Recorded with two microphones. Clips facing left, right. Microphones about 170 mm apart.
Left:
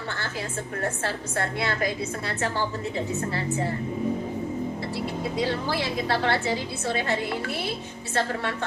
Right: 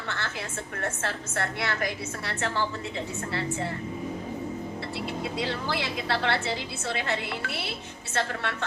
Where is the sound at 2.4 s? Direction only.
40° left (ahead or behind).